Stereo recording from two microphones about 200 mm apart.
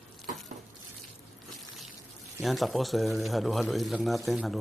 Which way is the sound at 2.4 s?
Centre (ahead or behind).